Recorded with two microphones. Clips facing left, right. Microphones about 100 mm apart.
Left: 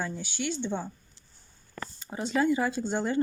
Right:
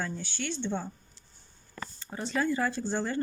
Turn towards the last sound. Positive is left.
turn(degrees=20)  # may be behind; listen again after turning